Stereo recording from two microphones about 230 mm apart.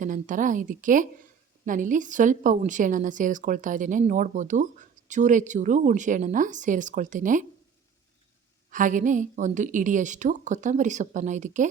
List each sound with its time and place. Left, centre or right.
0.0 s a woman's voice: right
8.7 s a woman's voice: right